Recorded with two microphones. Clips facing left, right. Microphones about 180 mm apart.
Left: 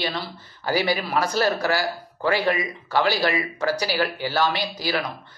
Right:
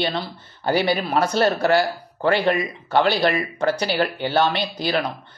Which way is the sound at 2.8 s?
25° right (ahead or behind).